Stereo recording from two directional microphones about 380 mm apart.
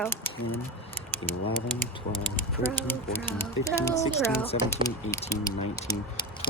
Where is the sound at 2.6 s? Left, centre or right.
Centre.